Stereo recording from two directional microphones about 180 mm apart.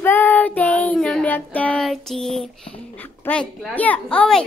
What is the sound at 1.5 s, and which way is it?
Child singing, 5° left (ahead or behind).